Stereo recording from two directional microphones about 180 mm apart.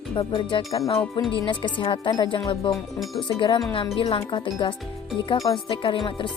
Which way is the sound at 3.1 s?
25° left (ahead or behind).